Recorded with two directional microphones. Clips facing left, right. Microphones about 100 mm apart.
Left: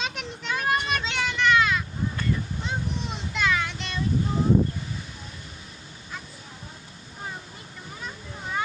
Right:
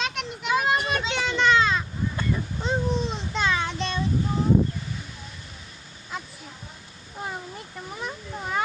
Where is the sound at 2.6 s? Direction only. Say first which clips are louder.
Right 8 dB; 30° right (ahead or behind).